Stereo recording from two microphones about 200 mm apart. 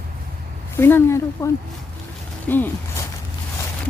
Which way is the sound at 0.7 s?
10° left (ahead or behind).